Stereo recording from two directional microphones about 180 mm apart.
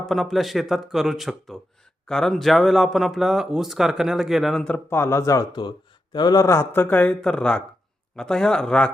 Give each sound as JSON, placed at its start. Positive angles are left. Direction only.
{"t": 0.0, "sound": "speech", "side_deg": 0}